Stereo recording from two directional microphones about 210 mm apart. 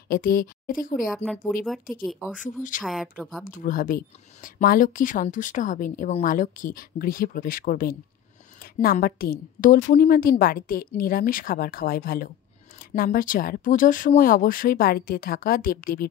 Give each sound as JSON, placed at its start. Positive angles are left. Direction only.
{"t": 0.1, "sound": "speech", "side_deg": 45}
{"t": 1.1, "sound": "speech", "side_deg": 0}
{"t": 2.4, "sound": "speech", "side_deg": 40}
{"t": 2.8, "sound": "speech", "side_deg": 0}
{"t": 3.4, "sound": "a woman's voice", "side_deg": 40}